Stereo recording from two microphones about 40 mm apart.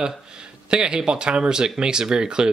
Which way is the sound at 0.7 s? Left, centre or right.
Right.